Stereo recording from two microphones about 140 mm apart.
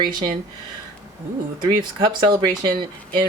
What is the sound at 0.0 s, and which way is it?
Speech, 30° right (ahead or behind).